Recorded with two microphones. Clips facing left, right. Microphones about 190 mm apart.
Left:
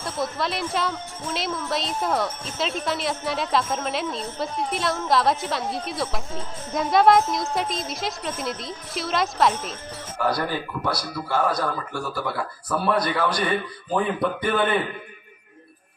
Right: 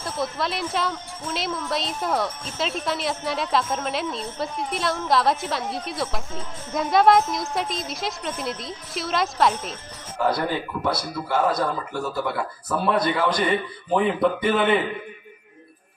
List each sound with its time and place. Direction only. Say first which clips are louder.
0.0 s speech: even; centre (ahead or behind)
10.3 s speech: right 1 dB; 20° right (ahead or behind)